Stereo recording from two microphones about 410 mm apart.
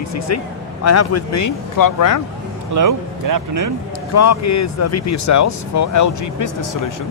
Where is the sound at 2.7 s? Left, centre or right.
Right.